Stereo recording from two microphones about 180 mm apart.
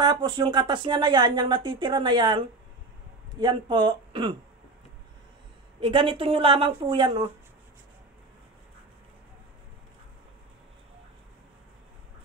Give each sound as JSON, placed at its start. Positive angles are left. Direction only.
{"t": 0.0, "sound": "speech", "side_deg": -25}
{"t": 5.8, "sound": "speech", "side_deg": -30}